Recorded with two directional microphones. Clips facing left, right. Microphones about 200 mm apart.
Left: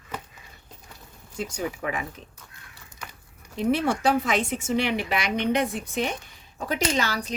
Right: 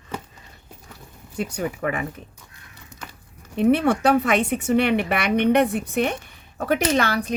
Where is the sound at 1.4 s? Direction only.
60° right (ahead or behind).